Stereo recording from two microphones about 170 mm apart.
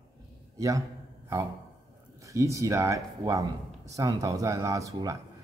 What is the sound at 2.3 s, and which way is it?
Speech, 20° right (ahead or behind).